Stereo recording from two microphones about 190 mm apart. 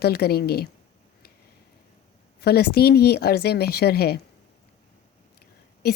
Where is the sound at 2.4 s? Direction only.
55° left (ahead or behind).